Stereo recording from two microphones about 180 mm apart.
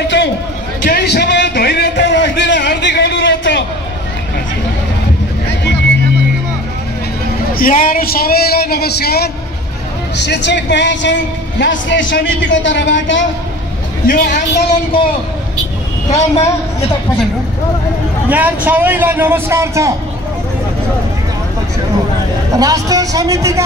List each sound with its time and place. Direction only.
0.8 s a sound: 65° left (ahead or behind)
7.5 s speech: 50° left (ahead or behind)
10.1 s speech: 75° left (ahead or behind); by 13.2 s 90° left
14.0 s a woman's voice: 50° left (ahead or behind)
16.1 s a woman's voice: 35° left (ahead or behind)
18.3 s a man's voice: 10° right (ahead or behind)
22.6 s a man's voice: 20° right (ahead or behind)